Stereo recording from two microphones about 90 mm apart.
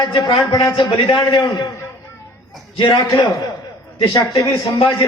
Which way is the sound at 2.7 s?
60° left (ahead or behind).